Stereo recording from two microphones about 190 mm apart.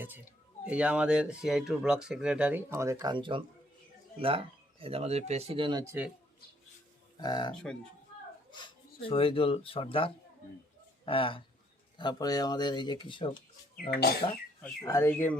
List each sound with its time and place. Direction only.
0.6 s speech: 5° right (ahead or behind); by 5.8 s 25° right (ahead or behind)
5.8 s a man's voice: 15° right (ahead or behind)
7.2 s speech: 20° left (ahead or behind)
7.5 s speech: 5° left (ahead or behind)
8.4 s a sound: 25° left (ahead or behind)
9.0 s speech: 30° left (ahead or behind)
13.9 s speech: 55° left (ahead or behind)
14.8 s speech: 10° left (ahead or behind)